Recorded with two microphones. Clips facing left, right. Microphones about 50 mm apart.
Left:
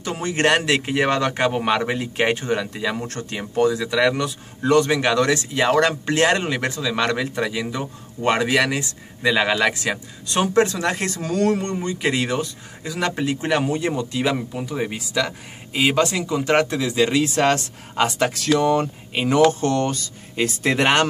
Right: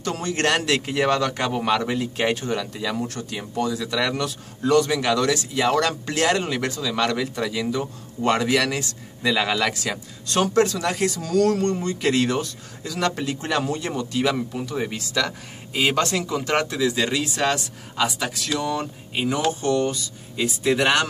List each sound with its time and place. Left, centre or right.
0.0 s speech: left
3.9 s speech: left
17.2 s speech: left